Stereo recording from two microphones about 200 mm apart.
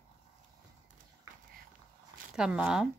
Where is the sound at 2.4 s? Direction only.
5° right (ahead or behind).